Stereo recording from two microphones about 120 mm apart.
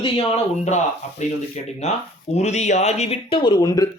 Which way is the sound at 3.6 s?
30° left (ahead or behind).